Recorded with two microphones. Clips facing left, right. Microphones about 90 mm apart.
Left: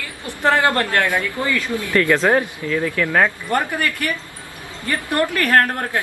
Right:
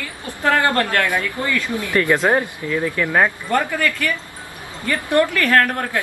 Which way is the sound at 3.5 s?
20° left (ahead or behind).